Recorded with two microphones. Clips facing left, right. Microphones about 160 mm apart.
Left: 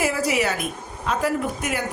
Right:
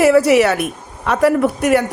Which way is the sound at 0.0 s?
70° right (ahead or behind).